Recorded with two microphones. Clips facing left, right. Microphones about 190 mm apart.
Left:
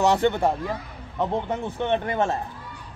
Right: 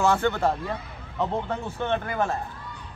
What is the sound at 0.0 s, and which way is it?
Speech, 20° left (ahead or behind).